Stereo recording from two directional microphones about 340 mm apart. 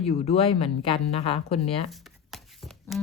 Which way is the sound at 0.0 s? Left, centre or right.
Centre.